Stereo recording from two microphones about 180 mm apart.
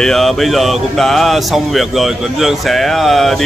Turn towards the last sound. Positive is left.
turn(degrees=0)  # may be behind; listen again after turning